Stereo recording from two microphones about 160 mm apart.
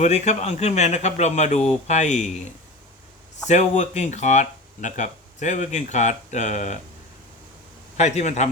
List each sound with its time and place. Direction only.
0.0 s speech: 45° left (ahead or behind)
3.5 s speech: 45° left (ahead or behind)
7.9 s speech: 45° left (ahead or behind)